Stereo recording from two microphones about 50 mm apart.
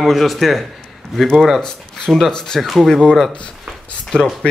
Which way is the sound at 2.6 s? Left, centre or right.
Centre.